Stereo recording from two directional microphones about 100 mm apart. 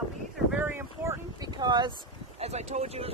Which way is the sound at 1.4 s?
40° right (ahead or behind).